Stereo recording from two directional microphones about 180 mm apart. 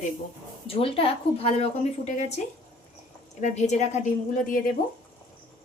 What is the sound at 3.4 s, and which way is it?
A woman's voice, 40° left (ahead or behind).